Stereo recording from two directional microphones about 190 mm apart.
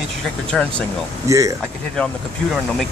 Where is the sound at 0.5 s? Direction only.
Centre (ahead or behind).